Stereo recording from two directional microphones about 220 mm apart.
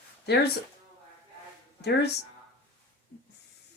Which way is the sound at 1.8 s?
50° left (ahead or behind).